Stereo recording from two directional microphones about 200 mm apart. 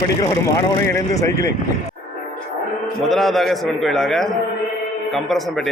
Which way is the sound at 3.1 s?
Centre (ahead or behind).